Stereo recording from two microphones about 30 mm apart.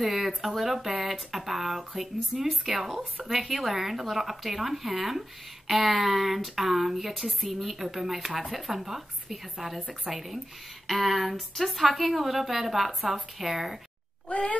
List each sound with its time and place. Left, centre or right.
0.0 s a sound: centre
0.4 s a woman's voice: centre
14.3 s speech: left